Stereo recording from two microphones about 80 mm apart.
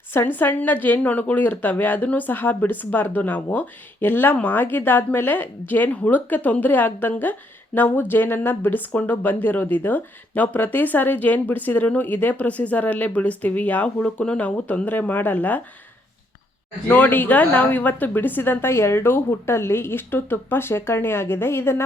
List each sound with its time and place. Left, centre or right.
0.1 s speech: left
16.9 s speech: left